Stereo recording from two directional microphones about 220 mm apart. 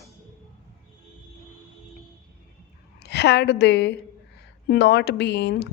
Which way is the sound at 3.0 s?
50° left (ahead or behind).